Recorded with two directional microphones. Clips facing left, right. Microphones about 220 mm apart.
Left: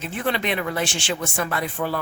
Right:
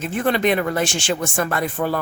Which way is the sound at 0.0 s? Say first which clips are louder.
Right 6 dB; 45° right (ahead or behind).